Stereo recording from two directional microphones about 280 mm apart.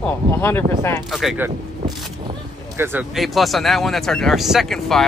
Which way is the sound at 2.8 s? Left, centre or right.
Centre.